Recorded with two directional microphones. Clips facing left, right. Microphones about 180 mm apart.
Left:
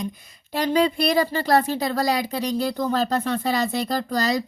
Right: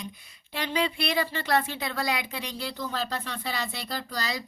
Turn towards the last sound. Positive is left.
turn(degrees=45)  # may be behind; listen again after turning